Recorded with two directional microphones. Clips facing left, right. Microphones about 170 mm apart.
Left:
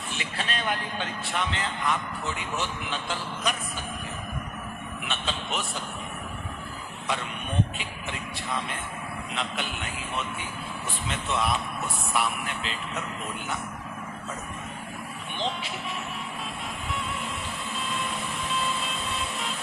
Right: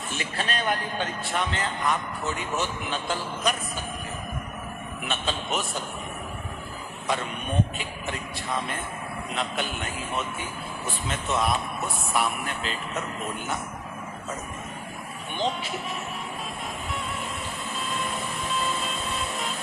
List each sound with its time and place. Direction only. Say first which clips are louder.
0.1 s speech: right 3 dB; 45° right (ahead or behind)
5.0 s speech: right 3 dB; 45° right (ahead or behind)
9.3 s speech: right 3 dB; 45° right (ahead or behind)
15.4 s vehicle: right 3 dB; 45° right (ahead or behind)
17.8 s vehicle: right 2 dB; 45° right (ahead or behind)